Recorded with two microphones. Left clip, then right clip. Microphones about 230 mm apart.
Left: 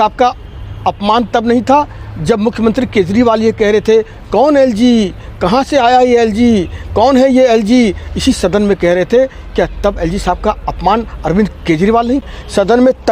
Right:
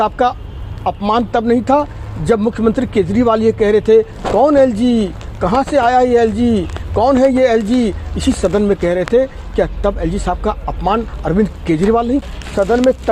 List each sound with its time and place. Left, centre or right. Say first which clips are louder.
0.0 s speech: left 4 dB; left
12.5 s speech: left 3 dB; left